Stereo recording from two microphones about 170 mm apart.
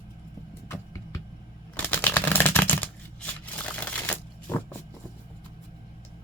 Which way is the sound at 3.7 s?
10° left (ahead or behind).